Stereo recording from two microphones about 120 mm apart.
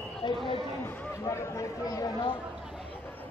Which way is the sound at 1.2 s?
30° left (ahead or behind).